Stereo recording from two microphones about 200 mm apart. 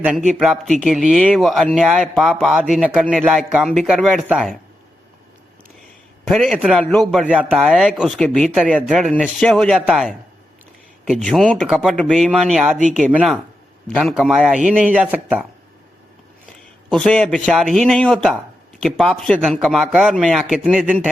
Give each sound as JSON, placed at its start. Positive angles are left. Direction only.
{"t": 0.3, "sound": "speech", "side_deg": 0}
{"t": 6.2, "sound": "speech", "side_deg": 5}
{"t": 16.9, "sound": "speech", "side_deg": 5}